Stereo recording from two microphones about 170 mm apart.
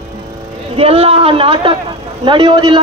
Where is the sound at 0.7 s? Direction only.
35° right (ahead or behind).